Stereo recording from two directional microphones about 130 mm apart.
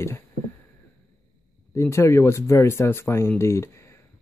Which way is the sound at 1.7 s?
20° left (ahead or behind).